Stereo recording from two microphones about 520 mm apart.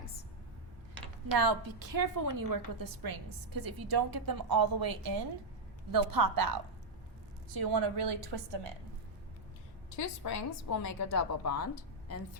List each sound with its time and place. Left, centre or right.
1.3 s a woman's voice: right
7.5 s a woman's voice: right
9.9 s a woman's voice: left